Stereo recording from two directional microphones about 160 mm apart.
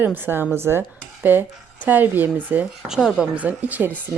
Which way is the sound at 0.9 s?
10° right (ahead or behind).